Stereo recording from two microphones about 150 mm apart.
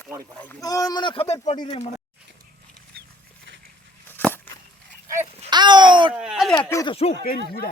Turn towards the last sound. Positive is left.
turn(degrees=85)